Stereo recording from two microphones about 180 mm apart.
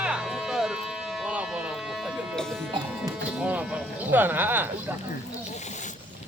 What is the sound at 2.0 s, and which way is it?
Music, 5° right (ahead or behind).